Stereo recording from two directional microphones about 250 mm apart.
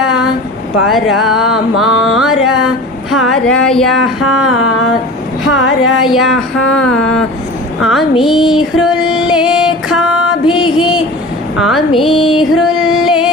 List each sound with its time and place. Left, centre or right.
0.9 s music: centre
2.5 s a sound: left
3.1 s music: centre
4.2 s mantra: left
5.5 s a sound: left
6.2 s music: centre
8.7 s female singing: centre
10.5 s music: centre
12.3 s female singing: centre